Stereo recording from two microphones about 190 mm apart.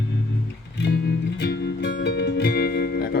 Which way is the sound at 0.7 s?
60° left (ahead or behind).